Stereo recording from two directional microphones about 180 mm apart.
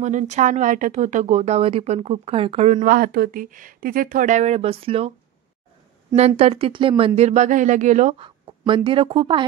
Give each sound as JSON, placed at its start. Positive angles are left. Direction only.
{"t": 0.0, "sound": "speech", "side_deg": -40}
{"t": 6.1, "sound": "speech", "side_deg": -35}
{"t": 7.2, "sound": "speech", "side_deg": -40}
{"t": 8.2, "sound": "speech", "side_deg": -30}